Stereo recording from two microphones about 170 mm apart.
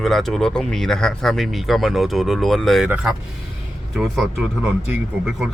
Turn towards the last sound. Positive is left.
turn(degrees=-5)  # may be behind; listen again after turning